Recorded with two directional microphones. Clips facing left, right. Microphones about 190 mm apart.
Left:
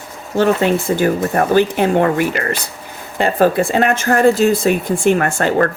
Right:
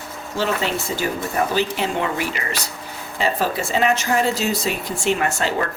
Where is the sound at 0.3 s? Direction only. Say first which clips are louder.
Left 9 dB; 55° left (ahead or behind).